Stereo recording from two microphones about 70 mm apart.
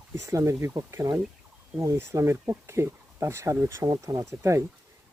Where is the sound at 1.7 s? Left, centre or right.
Right.